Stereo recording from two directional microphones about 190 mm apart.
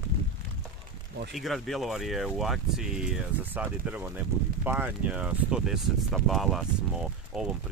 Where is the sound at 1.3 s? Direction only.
Centre (ahead or behind).